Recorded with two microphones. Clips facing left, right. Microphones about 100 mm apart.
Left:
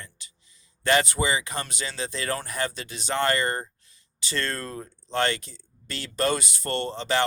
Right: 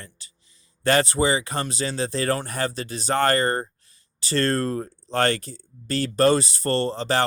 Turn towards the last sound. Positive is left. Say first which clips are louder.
# right 4 dB
turn(degrees=-40)  # may be behind; listen again after turning